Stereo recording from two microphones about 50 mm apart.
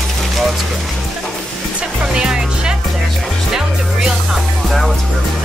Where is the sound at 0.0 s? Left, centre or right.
Centre.